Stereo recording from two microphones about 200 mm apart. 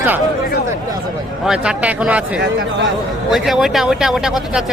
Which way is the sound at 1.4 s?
5° right (ahead or behind).